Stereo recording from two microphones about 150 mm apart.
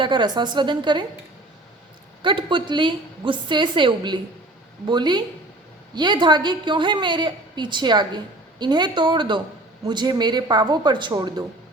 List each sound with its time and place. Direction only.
0.0 s a woman's voice: 30° right (ahead or behind)
2.2 s a woman's voice: 35° right (ahead or behind)